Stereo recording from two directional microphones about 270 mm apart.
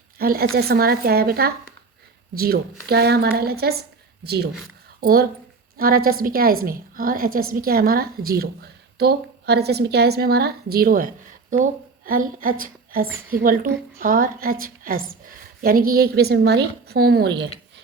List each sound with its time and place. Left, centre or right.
0.2 s a woman's voice: right